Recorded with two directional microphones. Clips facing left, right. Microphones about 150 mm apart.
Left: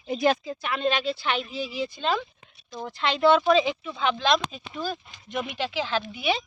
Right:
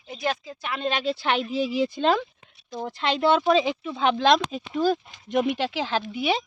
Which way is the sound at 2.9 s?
45° right (ahead or behind).